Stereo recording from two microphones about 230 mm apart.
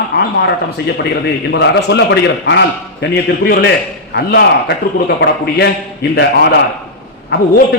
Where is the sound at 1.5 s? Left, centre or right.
Left.